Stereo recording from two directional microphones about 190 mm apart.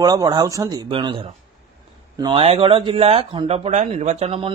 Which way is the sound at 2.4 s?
30° right (ahead or behind).